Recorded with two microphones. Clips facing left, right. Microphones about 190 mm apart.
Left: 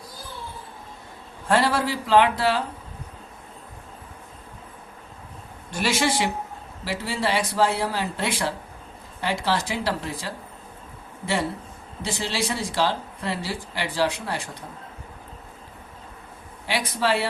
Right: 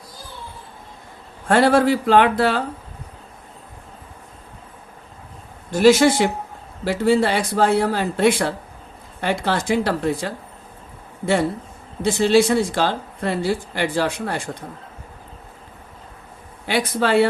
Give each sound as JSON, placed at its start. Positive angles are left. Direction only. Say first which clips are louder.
{"t": 1.5, "sound": "a man's voice", "louder": "right 7 dB", "side_deg": -55}
{"t": 5.8, "sound": "speech", "louder": "right 10 dB", "side_deg": -45}
{"t": 12.0, "sound": "speech", "louder": "right 12 dB", "side_deg": -50}
{"t": 16.6, "sound": "a man's voice", "louder": "right 4 dB", "side_deg": -55}